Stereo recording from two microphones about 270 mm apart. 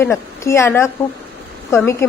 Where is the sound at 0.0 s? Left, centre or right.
Centre.